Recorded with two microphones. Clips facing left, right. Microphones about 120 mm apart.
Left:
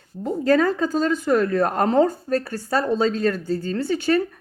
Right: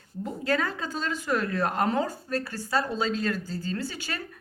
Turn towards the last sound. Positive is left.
turn(degrees=45)  # may be behind; listen again after turning